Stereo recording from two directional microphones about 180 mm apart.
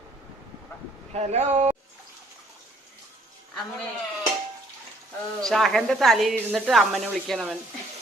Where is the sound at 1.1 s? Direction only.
35° right (ahead or behind).